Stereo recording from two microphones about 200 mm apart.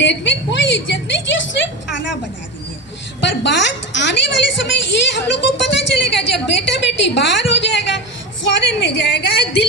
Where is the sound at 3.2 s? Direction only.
60° left (ahead or behind).